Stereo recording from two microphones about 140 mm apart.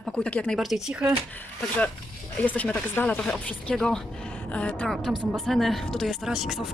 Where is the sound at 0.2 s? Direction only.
10° left (ahead or behind).